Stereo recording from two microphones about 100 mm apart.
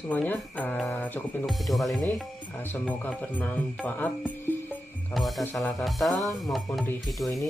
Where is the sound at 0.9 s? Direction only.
15° left (ahead or behind).